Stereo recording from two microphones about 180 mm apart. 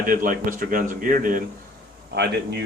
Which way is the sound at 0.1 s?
50° right (ahead or behind).